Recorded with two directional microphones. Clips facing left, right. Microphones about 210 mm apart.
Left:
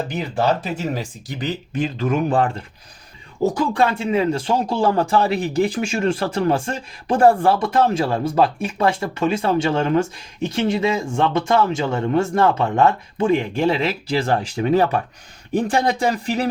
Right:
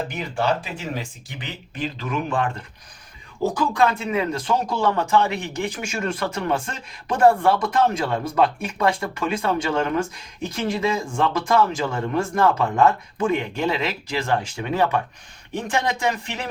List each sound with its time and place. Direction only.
0.3 s speech: 40° left (ahead or behind)
3.7 s a man's voice: 30° left (ahead or behind)